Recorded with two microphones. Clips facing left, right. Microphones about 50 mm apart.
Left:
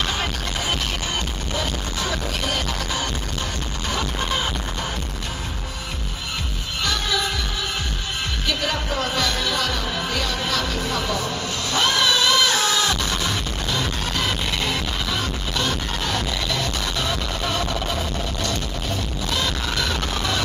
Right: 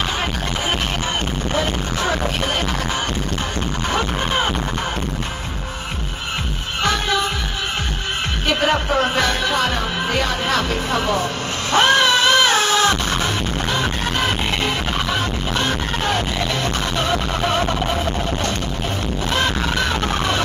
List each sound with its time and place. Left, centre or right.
1.5 s music: right
6.8 s music: right
8.5 s music: right
19.3 s music: right